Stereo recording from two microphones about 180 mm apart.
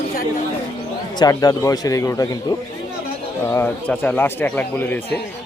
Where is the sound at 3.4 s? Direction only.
15° left (ahead or behind).